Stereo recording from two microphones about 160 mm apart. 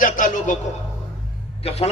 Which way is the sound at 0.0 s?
55° left (ahead or behind).